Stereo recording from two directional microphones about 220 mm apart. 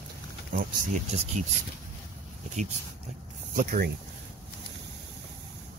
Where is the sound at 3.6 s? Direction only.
45° right (ahead or behind).